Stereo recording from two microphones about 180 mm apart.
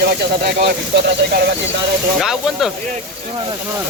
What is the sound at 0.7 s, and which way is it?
Speech, 70° right (ahead or behind).